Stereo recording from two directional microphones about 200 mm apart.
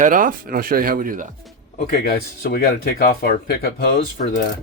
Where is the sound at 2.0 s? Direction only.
50° left (ahead or behind).